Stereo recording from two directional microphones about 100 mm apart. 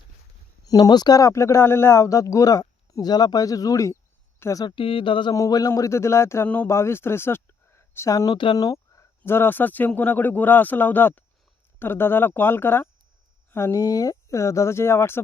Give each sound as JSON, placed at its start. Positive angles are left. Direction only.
{"t": 0.6, "sound": "speech", "side_deg": 40}
{"t": 4.4, "sound": "a sound", "side_deg": 30}
{"t": 4.6, "sound": "speech", "side_deg": 60}
{"t": 5.3, "sound": "speech", "side_deg": 35}